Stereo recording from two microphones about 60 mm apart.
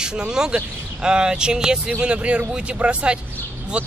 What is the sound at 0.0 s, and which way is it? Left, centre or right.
Speech, centre.